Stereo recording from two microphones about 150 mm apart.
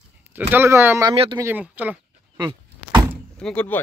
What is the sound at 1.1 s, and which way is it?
Speech, 40° right (ahead or behind).